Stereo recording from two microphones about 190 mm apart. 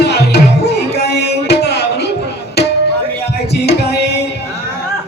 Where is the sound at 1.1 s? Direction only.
60° left (ahead or behind).